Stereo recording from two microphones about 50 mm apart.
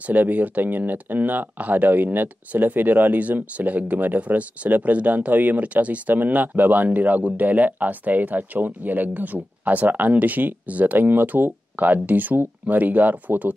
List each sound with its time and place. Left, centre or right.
0.0 s speech: right